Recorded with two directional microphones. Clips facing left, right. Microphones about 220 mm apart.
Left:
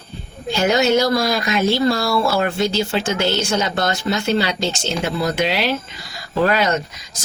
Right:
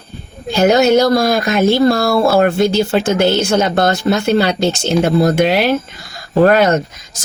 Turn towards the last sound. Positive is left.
turn(degrees=-50)  # may be behind; listen again after turning